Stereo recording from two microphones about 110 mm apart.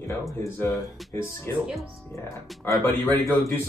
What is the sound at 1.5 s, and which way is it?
Speech, 25° left (ahead or behind).